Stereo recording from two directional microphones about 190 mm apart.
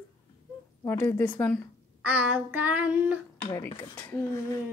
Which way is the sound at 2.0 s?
10° right (ahead or behind).